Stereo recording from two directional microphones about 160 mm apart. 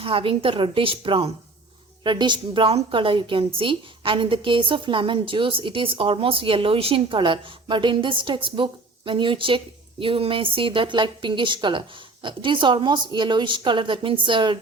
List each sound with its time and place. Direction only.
0.0 s a woman's voice: 35° right (ahead or behind)